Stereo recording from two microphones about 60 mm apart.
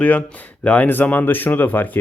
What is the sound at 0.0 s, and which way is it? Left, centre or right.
Speech, left.